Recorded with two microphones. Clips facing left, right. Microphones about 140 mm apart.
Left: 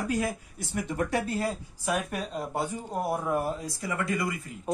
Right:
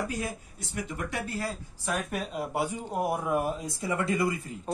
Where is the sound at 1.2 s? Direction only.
25° left (ahead or behind).